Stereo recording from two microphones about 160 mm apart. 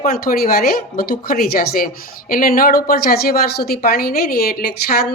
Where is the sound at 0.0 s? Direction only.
65° left (ahead or behind).